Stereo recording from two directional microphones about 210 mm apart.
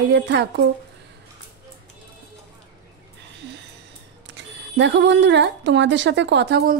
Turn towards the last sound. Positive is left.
turn(degrees=-50)  # may be behind; listen again after turning